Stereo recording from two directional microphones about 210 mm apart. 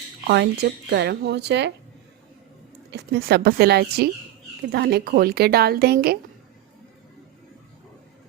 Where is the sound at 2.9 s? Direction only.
50° right (ahead or behind).